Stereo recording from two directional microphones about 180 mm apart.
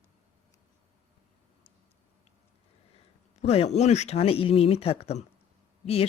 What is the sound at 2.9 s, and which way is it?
Speech, 35° left (ahead or behind).